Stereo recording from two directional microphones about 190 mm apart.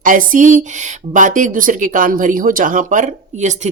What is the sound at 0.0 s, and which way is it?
Speech, 45° right (ahead or behind).